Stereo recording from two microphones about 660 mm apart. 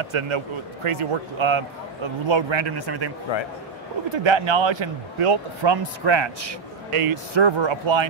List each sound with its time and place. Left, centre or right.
0.0 s a man's voice: right
4.1 s a man's voice: right